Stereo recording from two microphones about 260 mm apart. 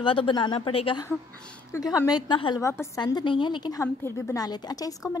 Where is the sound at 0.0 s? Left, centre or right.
Centre.